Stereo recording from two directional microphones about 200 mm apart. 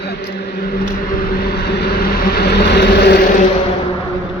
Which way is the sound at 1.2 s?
50° left (ahead or behind).